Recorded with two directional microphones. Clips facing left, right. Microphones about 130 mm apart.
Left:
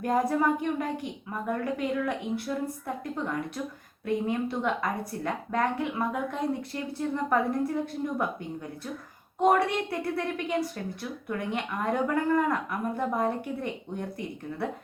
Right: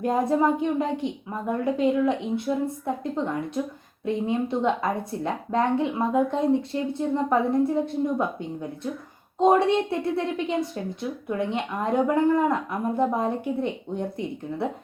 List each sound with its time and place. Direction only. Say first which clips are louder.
0.0 s a woman's voice: right 3 dB; 25° right (ahead or behind)